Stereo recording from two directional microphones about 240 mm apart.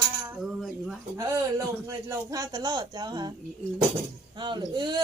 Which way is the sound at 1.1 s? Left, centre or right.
Centre.